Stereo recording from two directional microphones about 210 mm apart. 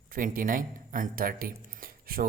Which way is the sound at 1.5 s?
40° right (ahead or behind).